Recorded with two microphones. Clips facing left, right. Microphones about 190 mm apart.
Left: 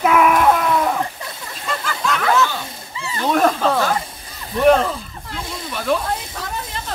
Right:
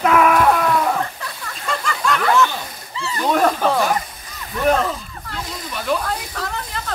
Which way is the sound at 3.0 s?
25° left (ahead or behind).